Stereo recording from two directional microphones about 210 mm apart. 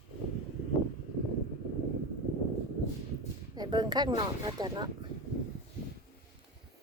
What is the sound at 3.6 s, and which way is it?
Speech, 20° right (ahead or behind).